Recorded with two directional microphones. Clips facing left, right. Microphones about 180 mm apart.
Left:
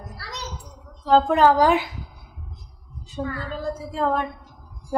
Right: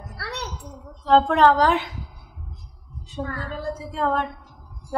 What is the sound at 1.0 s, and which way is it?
Speech, 5° left (ahead or behind).